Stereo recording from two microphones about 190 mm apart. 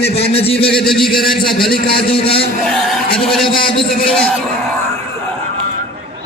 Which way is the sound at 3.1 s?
30° left (ahead or behind).